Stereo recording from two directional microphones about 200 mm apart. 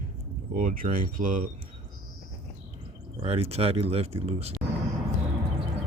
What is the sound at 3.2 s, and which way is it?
Speech, 30° right (ahead or behind).